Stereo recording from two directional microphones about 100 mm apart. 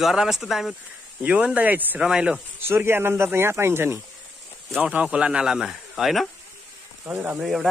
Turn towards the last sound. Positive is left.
turn(degrees=-5)  # may be behind; listen again after turning